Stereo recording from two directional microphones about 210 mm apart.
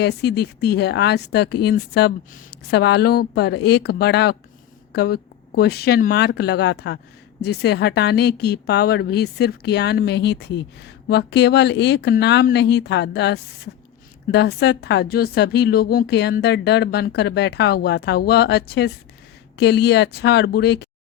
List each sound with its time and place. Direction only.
0.0 s speech: 50° left (ahead or behind)